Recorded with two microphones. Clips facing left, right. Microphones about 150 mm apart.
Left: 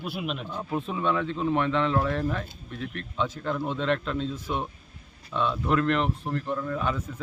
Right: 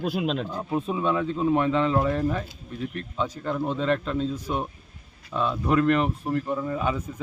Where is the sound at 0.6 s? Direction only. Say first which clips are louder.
Left 1 dB; 15° right (ahead or behind).